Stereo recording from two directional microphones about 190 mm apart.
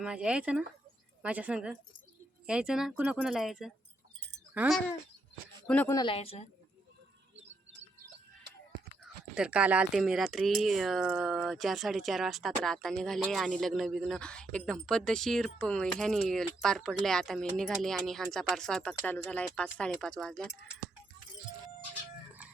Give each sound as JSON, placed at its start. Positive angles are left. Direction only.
{"t": 0.0, "sound": "a woman's voice", "side_deg": -5}
{"t": 5.6, "sound": "speech", "side_deg": 5}
{"t": 5.9, "sound": "speech", "side_deg": 20}
{"t": 6.1, "sound": "a woman's voice", "side_deg": 35}
{"t": 9.3, "sound": "speech", "side_deg": -5}